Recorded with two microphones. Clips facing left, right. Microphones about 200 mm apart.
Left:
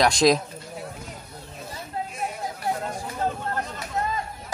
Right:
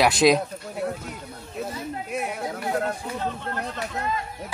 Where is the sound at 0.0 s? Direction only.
5° right (ahead or behind).